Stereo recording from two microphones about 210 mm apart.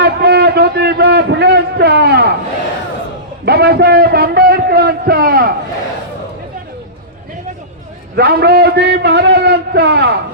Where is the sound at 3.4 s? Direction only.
50° right (ahead or behind).